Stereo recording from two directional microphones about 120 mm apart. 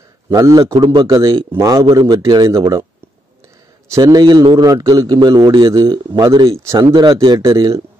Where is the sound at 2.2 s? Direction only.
35° right (ahead or behind).